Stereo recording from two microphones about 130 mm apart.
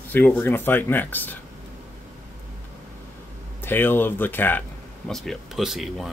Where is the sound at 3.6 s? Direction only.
15° left (ahead or behind).